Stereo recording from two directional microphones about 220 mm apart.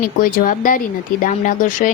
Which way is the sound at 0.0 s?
40° left (ahead or behind).